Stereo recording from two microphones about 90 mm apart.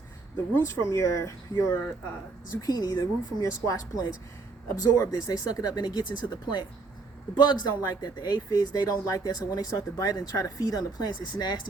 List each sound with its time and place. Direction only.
0.8 s speech: 35° left (ahead or behind)
2.6 s speech: 45° left (ahead or behind)
7.7 s speech: 45° left (ahead or behind)